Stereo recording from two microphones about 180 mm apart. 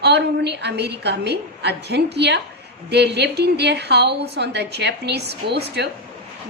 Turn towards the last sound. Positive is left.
turn(degrees=-70)  # may be behind; listen again after turning